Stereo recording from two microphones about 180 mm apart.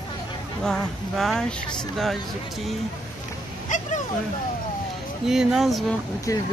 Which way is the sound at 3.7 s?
45° left (ahead or behind).